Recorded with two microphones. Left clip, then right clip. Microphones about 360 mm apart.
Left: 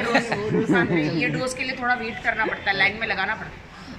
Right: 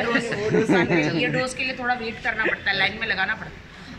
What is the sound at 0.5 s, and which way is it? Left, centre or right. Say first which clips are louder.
Speech: right 2 dB; right.